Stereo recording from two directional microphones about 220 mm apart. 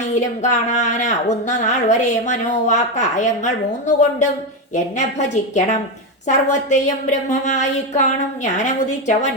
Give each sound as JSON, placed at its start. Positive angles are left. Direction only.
{"t": 0.2, "sound": "speech", "side_deg": 35}